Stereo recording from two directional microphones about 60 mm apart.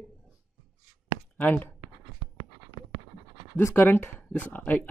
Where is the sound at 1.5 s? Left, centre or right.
Left.